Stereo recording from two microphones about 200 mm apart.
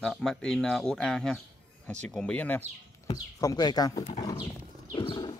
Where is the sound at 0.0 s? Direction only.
Centre (ahead or behind).